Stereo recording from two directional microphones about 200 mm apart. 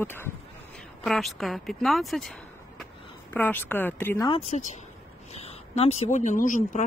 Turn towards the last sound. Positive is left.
turn(degrees=40)  # may be behind; listen again after turning